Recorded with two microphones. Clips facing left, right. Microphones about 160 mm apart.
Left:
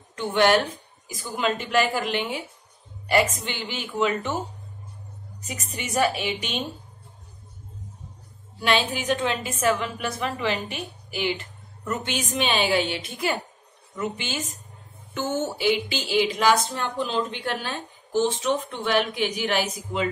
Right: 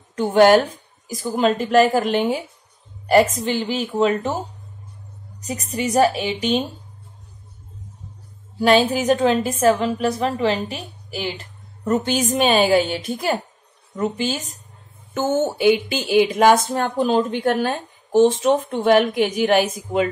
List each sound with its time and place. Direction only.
0.1 s a woman's voice: 40° right (ahead or behind)
5.5 s a woman's voice: 35° right (ahead or behind)
8.5 s a woman's voice: 40° right (ahead or behind)
15.1 s a woman's voice: 55° right (ahead or behind)